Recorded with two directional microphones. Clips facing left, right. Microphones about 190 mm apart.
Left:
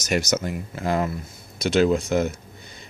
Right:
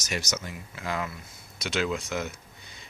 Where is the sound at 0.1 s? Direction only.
50° left (ahead or behind).